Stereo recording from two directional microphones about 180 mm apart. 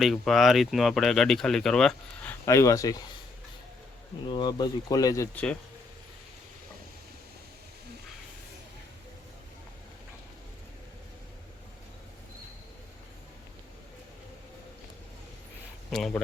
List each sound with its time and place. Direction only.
0.0 s speech: centre (ahead or behind)
2.5 s speech: 15° left (ahead or behind)
4.3 s speech: 25° left (ahead or behind); by 5.5 s 10° left (ahead or behind)
15.9 s speech: centre (ahead or behind)